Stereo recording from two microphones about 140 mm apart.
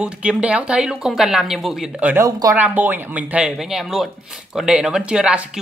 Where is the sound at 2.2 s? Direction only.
25° right (ahead or behind).